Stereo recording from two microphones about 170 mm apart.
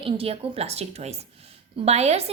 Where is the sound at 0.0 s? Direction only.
35° right (ahead or behind).